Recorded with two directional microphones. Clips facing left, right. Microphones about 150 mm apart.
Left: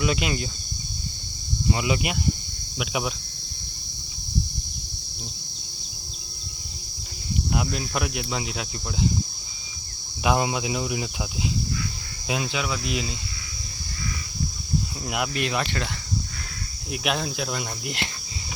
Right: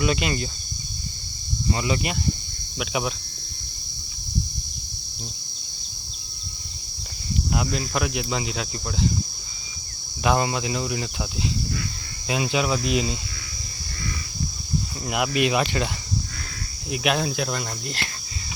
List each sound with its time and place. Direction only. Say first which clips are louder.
0.0 s speech: right 1 dB; centre (ahead or behind)
1.7 s speech: even; 10° left (ahead or behind)
7.5 s speech: right 2 dB; 5° left (ahead or behind)
10.2 s speech: right 1 dB; 5° left (ahead or behind)
12.5 s cricket: right 5 dB; 25° right (ahead or behind)
15.0 s speech: right 6 dB; centre (ahead or behind)
15.3 s speech: right 5 dB; 15° right (ahead or behind)
16.9 s speech: right 3 dB; centre (ahead or behind)
17.8 s speech: left 1 dB; 20° left (ahead or behind)